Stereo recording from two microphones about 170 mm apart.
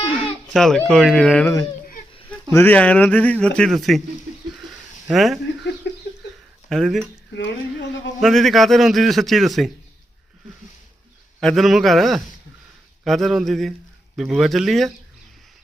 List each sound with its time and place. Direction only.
0.5 s a man's voice: 5° left (ahead or behind)
2.3 s speech: 15° left (ahead or behind)
5.0 s a man's voice: centre (ahead or behind)
5.8 s a sound: 90° left
6.7 s a man's voice: centre (ahead or behind)
7.3 s speech: 90° left
8.2 s a man's voice: centre (ahead or behind)
11.3 s a man's voice: centre (ahead or behind)